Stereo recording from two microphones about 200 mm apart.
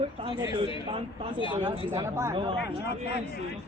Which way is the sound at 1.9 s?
15° right (ahead or behind).